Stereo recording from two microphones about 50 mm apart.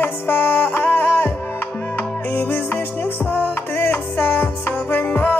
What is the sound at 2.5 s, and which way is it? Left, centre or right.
Music, left.